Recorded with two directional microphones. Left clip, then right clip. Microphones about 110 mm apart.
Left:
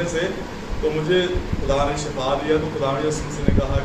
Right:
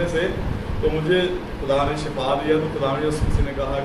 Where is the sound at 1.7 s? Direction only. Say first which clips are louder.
Even; 20° right (ahead or behind).